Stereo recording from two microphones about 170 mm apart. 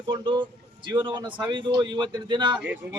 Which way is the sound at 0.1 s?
30° right (ahead or behind).